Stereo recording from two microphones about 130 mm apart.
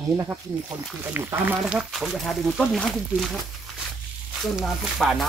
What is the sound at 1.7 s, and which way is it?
Speech, 5° right (ahead or behind).